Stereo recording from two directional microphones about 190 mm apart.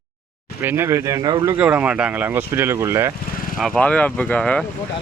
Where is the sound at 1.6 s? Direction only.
5° right (ahead or behind).